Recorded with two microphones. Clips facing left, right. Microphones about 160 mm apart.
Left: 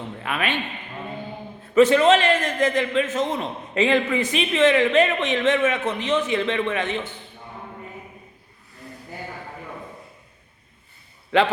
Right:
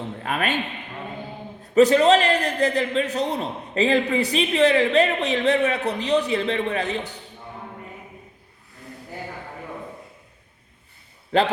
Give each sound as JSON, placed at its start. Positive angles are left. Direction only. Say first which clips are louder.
{"t": 0.2, "sound": "a sound", "louder": "right 1 dB", "side_deg": -40}
{"t": 1.7, "sound": "a man's voice", "louder": "even", "side_deg": -40}
{"t": 11.3, "sound": "a man's voice", "louder": "left 1 dB", "side_deg": -40}